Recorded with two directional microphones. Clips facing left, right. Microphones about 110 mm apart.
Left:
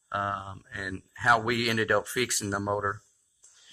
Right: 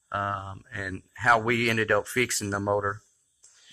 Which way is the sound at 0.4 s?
20° left (ahead or behind).